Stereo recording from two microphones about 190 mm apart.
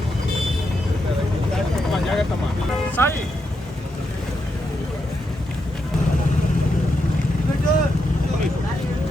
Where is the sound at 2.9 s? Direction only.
10° left (ahead or behind).